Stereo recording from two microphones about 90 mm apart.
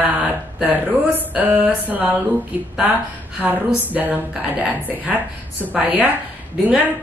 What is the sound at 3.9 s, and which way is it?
Speech, 20° right (ahead or behind).